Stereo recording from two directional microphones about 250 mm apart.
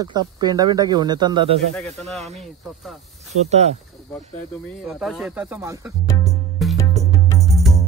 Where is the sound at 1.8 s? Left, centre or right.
Centre.